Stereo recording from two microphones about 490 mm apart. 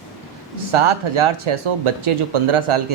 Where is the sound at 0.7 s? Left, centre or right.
Right.